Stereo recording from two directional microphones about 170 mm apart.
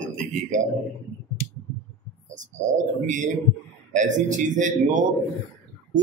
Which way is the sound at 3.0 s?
45° right (ahead or behind).